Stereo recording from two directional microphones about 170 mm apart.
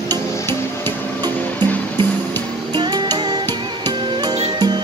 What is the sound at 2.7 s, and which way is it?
Music, 25° right (ahead or behind).